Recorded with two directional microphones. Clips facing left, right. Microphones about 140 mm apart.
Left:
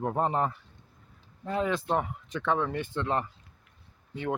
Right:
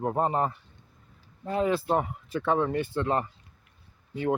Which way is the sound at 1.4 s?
35° right (ahead or behind).